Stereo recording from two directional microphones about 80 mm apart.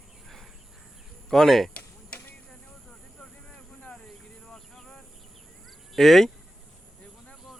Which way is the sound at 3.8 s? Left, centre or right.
Centre.